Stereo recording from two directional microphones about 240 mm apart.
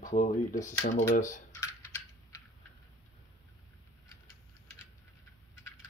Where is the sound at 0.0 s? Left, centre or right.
Left.